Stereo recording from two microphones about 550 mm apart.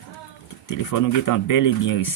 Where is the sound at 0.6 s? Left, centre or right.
Left.